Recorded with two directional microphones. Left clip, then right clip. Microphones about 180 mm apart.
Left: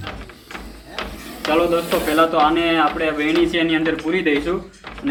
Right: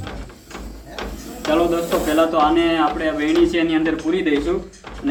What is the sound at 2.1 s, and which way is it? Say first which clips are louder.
A man's voice: left 1 dB; 5° right (ahead or behind).